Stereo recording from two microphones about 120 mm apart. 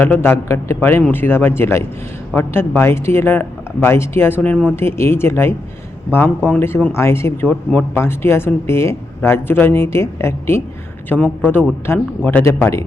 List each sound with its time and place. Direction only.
0.0 s a man's voice: 20° left (ahead or behind)